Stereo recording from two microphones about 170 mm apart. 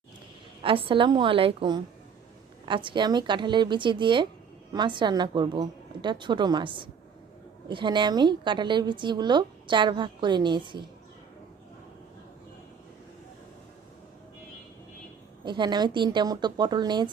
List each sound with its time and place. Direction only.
0.6 s a woman's voice: 30° right (ahead or behind)
15.4 s a woman's voice: 25° right (ahead or behind)